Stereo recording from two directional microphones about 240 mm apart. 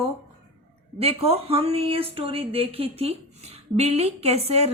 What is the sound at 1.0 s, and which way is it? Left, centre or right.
A woman's voice, right.